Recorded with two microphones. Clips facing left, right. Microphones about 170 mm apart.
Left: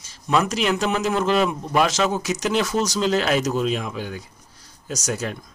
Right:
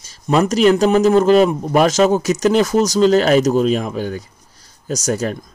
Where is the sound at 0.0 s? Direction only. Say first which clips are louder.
Right 5 dB; 40° right (ahead or behind).